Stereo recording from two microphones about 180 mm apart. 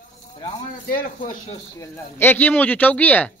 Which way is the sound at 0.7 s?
50° left (ahead or behind).